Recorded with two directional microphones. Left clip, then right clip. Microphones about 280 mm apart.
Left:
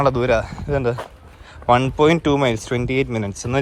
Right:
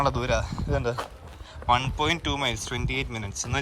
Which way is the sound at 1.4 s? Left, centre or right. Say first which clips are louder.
Left 7 dB; centre.